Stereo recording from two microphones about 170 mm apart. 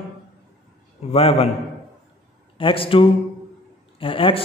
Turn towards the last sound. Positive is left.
turn(degrees=30)  # may be behind; listen again after turning